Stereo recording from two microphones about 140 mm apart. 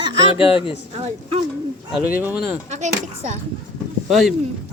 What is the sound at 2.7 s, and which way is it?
Speech, 60° right (ahead or behind).